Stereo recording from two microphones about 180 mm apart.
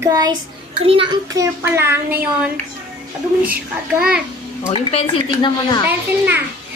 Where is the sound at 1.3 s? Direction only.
15° right (ahead or behind).